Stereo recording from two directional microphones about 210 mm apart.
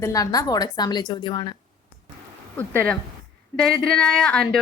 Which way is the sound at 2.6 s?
5° left (ahead or behind).